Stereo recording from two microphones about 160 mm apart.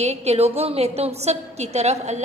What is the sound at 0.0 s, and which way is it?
A woman's voice, 45° right (ahead or behind).